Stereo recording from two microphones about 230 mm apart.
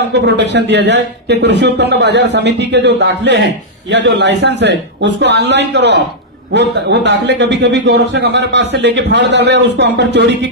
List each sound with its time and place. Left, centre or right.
0.1 s a man's voice: right